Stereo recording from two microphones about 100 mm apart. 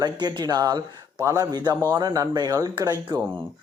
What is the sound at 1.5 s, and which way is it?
Speech, 45° right (ahead or behind).